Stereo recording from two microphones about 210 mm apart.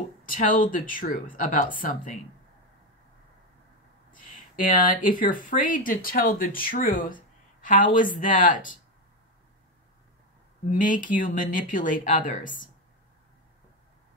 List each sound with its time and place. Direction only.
0.2 s speech: 40° left (ahead or behind)
4.1 s speech: 40° left (ahead or behind)
10.8 s speech: 40° left (ahead or behind)